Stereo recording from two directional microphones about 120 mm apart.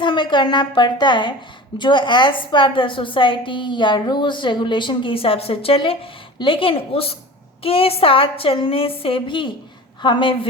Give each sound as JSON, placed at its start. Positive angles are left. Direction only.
{"t": 0.0, "sound": "a woman's voice", "side_deg": 40}